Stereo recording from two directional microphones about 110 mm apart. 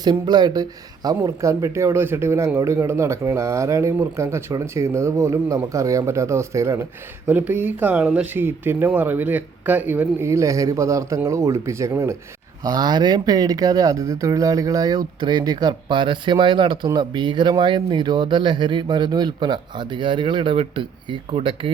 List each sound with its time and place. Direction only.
0.0 s speech: 40° right (ahead or behind)
7.3 s speech: 15° right (ahead or behind)
12.6 s speech: 35° right (ahead or behind)
21.2 s speech: 60° right (ahead or behind)